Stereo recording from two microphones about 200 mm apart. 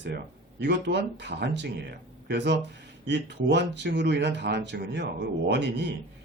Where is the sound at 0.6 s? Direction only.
55° right (ahead or behind).